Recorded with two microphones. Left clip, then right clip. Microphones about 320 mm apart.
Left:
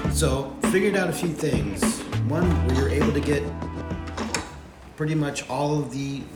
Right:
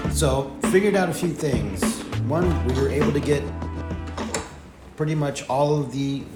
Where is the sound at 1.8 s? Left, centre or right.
Centre.